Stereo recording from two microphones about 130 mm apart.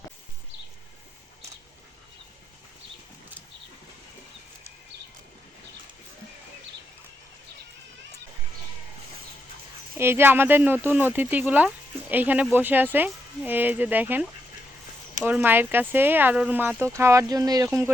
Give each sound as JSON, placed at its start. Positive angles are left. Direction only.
{"t": 10.0, "sound": "speech", "side_deg": -15}